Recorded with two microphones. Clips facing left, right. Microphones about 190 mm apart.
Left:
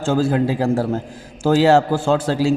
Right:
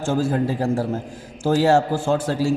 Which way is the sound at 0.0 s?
70° left (ahead or behind).